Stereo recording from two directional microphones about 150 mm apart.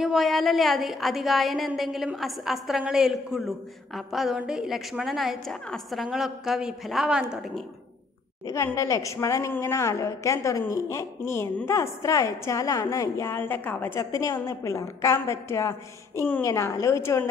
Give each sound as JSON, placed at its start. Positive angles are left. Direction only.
{"t": 0.0, "sound": "a woman's voice", "side_deg": 0}
{"t": 8.5, "sound": "a woman's voice", "side_deg": 20}